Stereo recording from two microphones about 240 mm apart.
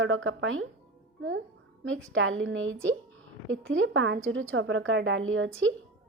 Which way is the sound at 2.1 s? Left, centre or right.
Right.